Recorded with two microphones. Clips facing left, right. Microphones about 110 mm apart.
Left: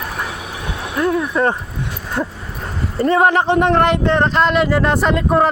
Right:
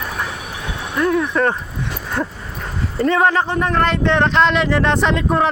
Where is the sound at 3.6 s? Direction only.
25° left (ahead or behind).